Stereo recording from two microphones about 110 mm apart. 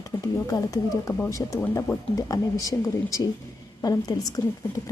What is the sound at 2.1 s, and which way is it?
Speech, 30° left (ahead or behind).